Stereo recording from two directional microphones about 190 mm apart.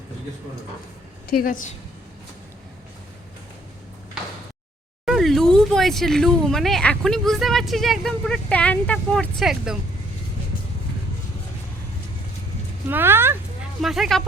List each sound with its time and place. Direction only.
1.3 s a woman's voice: 50° left (ahead or behind)
5.0 s speech: centre (ahead or behind)
12.9 s speech: 10° right (ahead or behind)
13.8 s speech: centre (ahead or behind)